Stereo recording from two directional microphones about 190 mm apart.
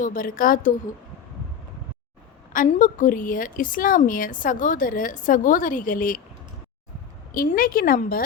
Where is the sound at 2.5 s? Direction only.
45° left (ahead or behind).